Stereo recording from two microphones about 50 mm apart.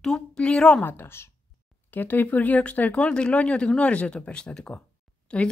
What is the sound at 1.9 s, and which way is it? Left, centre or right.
A woman's voice, left.